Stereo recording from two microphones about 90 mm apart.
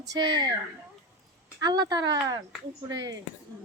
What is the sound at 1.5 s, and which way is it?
Speech, 50° right (ahead or behind).